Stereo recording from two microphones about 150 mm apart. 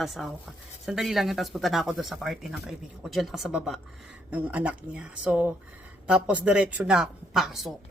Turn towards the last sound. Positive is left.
turn(degrees=0)  # may be behind; listen again after turning